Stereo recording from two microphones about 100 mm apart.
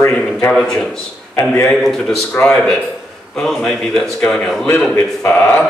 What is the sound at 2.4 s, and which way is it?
Speech, 30° left (ahead or behind).